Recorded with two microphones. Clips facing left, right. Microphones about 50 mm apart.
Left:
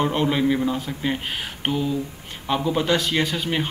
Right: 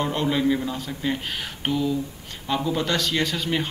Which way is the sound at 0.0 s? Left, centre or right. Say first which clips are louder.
Left 2 dB; centre.